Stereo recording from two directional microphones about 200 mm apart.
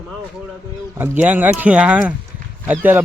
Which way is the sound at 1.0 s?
10° right (ahead or behind).